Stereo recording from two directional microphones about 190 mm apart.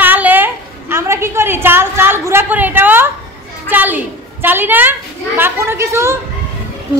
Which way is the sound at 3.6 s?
10° right (ahead or behind).